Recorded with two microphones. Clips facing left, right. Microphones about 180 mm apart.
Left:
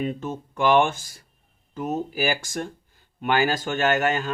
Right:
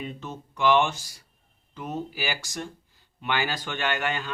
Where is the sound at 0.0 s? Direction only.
50° left (ahead or behind).